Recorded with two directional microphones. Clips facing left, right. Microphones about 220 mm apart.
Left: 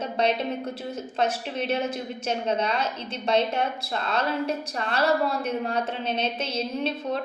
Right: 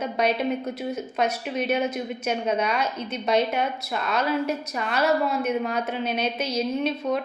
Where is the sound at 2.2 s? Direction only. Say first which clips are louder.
Right 1 dB; 10° right (ahead or behind).